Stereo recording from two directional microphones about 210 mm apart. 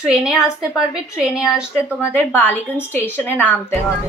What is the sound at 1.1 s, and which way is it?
Speech, 5° right (ahead or behind).